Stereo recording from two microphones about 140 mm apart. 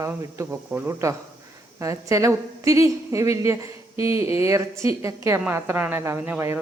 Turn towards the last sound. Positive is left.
turn(degrees=-15)  # may be behind; listen again after turning